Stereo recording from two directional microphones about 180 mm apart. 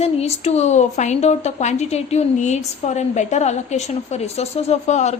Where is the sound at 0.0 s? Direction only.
35° left (ahead or behind).